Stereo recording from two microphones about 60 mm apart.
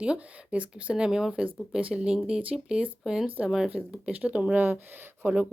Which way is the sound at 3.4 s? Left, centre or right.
Centre.